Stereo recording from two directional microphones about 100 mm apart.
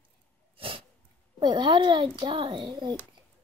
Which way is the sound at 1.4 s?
55° right (ahead or behind).